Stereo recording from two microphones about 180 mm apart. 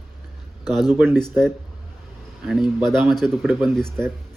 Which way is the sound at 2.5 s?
Centre (ahead or behind).